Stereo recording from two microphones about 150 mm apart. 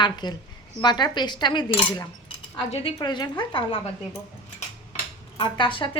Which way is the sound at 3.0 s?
30° left (ahead or behind).